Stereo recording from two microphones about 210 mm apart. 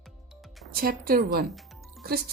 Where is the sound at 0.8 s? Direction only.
45° right (ahead or behind).